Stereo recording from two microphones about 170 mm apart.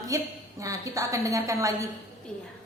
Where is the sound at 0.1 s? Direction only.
20° right (ahead or behind).